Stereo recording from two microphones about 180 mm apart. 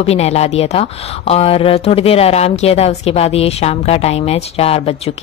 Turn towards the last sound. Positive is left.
turn(degrees=35)  # may be behind; listen again after turning